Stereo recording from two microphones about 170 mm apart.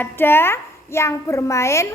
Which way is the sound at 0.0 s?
15° left (ahead or behind).